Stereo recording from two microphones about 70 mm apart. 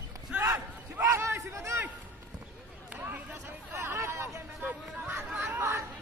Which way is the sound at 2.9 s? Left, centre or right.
Right.